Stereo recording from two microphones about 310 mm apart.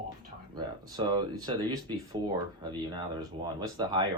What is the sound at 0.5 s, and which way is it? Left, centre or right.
Speech, centre.